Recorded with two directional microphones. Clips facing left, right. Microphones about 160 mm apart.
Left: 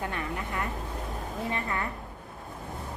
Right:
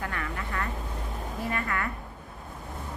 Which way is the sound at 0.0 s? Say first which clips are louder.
Left 1 dB; 20° left (ahead or behind).